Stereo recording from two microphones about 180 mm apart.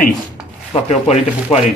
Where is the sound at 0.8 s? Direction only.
35° left (ahead or behind).